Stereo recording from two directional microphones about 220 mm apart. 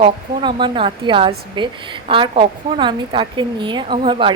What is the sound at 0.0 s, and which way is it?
A woman's voice, 20° right (ahead or behind).